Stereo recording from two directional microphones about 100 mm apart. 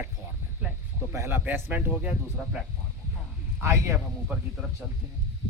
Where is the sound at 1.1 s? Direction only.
25° right (ahead or behind).